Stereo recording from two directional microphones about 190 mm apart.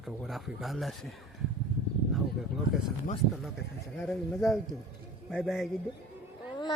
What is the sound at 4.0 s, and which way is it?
Speech, 5° left (ahead or behind).